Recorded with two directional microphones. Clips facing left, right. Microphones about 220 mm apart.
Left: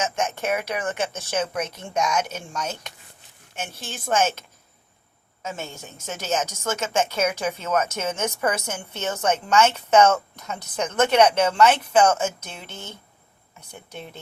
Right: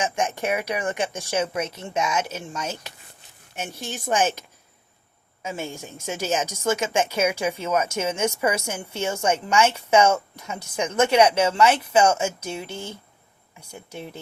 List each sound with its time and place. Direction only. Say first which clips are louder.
0.3 s speech: even; 15° right (ahead or behind)
4.0 s speech: even; 15° right (ahead or behind)